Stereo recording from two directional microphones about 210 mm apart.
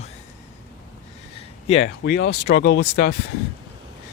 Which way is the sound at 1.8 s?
55° left (ahead or behind).